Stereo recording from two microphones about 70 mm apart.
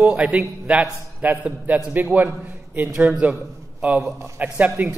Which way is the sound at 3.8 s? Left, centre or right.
Centre.